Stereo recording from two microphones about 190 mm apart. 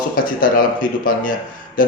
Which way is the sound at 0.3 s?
45° left (ahead or behind).